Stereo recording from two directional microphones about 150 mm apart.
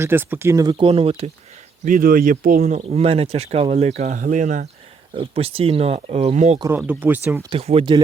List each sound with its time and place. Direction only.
0.0 s speech: 15° right (ahead or behind)
0.9 s speech: 40° right (ahead or behind)
1.8 s speech: 65° right (ahead or behind)
2.6 s speech: 45° right (ahead or behind)
5.1 s speech: 40° right (ahead or behind)
6.6 s speech: 15° right (ahead or behind)
7.5 s speech: 40° right (ahead or behind)